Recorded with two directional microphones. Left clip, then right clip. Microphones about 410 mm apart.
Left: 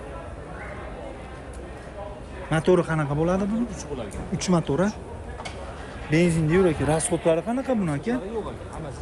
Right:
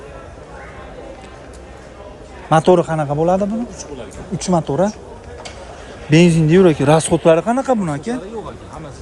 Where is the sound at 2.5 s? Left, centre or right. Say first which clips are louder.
Right 9 dB; centre.